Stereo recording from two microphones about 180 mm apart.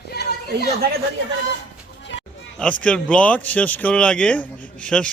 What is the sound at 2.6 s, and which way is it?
Speech, 5° left (ahead or behind).